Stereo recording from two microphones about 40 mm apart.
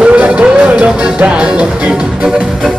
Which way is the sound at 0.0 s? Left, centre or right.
Right.